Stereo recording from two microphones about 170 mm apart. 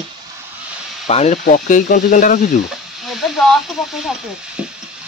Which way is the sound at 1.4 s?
50° left (ahead or behind).